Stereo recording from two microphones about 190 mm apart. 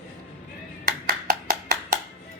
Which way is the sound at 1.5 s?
50° right (ahead or behind).